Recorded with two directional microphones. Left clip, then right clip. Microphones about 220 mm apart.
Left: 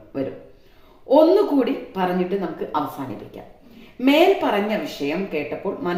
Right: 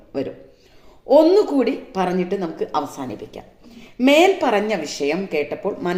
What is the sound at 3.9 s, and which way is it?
A woman's voice, 50° right (ahead or behind).